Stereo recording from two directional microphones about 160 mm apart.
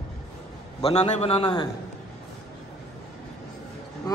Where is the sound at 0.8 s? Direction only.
45° left (ahead or behind); by 1.7 s 30° left (ahead or behind).